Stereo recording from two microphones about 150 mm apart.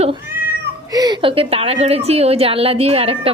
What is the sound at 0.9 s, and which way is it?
A woman's voice, 30° right (ahead or behind).